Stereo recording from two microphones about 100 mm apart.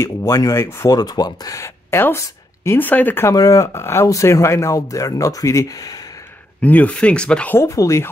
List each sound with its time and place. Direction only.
0.0 s speech: 30° left (ahead or behind)
0.8 s speech: 40° left (ahead or behind); by 3.3 s 15° left (ahead or behind)
3.3 s speech: 35° left (ahead or behind)
6.6 s speech: 15° left (ahead or behind)
7.5 s speech: 30° left (ahead or behind)